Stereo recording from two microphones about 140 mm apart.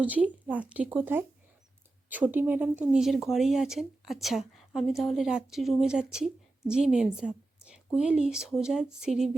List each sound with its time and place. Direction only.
0.0 s speech: 10° right (ahead or behind)